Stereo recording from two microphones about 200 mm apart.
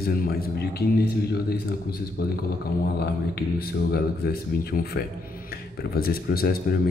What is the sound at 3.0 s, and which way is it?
Speech, 50° left (ahead or behind).